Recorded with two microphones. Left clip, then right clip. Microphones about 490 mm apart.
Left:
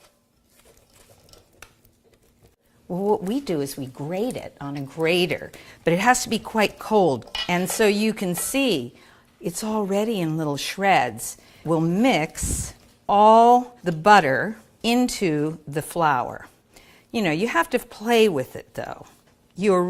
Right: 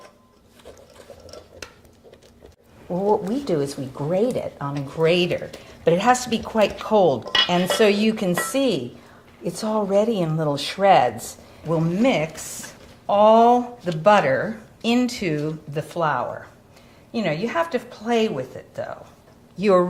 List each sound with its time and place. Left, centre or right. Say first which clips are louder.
3.1 s speech: right 2 dB; left
19.5 s speech: right 3 dB; left